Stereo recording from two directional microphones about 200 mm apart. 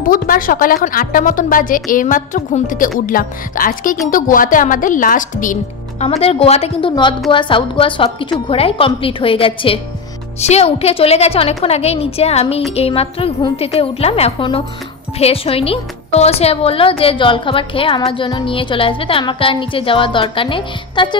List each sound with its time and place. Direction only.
0.0 s a woman's voice: 45° left (ahead or behind)
6.0 s a woman's voice: 30° left (ahead or behind)